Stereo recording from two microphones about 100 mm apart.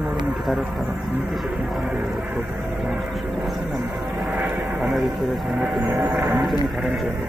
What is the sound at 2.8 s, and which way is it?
Music, 5° right (ahead or behind).